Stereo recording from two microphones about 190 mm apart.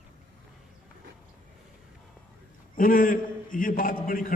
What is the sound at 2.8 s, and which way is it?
A man's voice, 45° left (ahead or behind).